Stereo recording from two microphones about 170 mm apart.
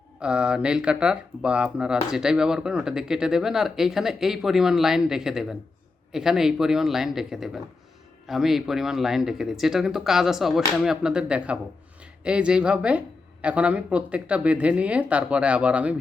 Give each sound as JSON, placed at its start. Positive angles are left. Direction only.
{"t": 0.2, "sound": "speech", "side_deg": -5}